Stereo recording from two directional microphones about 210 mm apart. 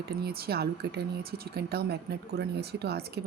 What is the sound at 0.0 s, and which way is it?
Speech, 50° right (ahead or behind).